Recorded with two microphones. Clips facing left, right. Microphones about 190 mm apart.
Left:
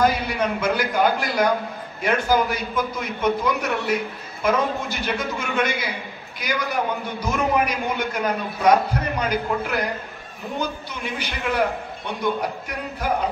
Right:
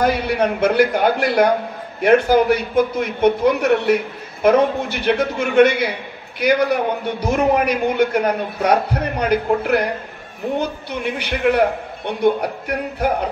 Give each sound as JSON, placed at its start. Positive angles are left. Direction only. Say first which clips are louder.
{"t": 0.0, "sound": "a man's voice", "louder": "right 3 dB", "side_deg": -60}